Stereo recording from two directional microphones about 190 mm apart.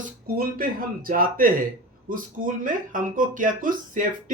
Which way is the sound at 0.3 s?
50° right (ahead or behind).